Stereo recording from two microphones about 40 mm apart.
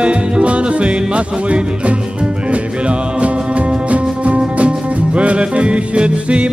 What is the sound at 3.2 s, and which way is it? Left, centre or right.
Music, right.